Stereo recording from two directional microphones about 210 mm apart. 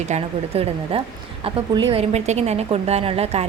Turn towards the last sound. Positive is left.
turn(degrees=-30)  # may be behind; listen again after turning